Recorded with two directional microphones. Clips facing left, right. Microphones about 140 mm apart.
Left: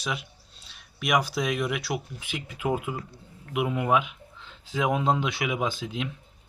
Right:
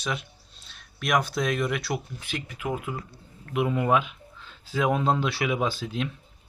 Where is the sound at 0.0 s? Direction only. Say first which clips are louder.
Right 1 dB; 5° left (ahead or behind).